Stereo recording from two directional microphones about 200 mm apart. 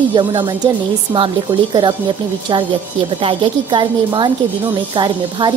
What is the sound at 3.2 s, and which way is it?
A woman's voice, 25° right (ahead or behind).